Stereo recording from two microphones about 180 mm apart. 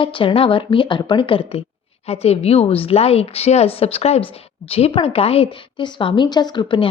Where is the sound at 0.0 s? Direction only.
30° left (ahead or behind).